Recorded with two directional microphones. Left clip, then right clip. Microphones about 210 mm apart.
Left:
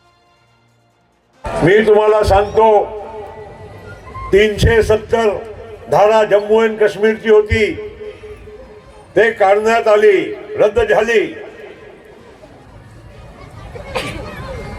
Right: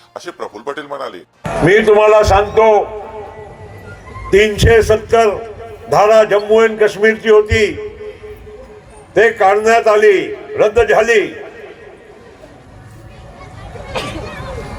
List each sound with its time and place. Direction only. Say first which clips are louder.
1.6 s a man's voice: right 1 dB; 50° right (ahead or behind)
4.3 s a man's voice: right 2 dB; 50° right (ahead or behind)
9.1 s a man's voice: right 1 dB; 50° right (ahead or behind)